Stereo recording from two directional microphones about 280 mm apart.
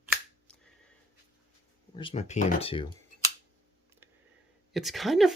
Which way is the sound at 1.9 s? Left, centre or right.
Centre.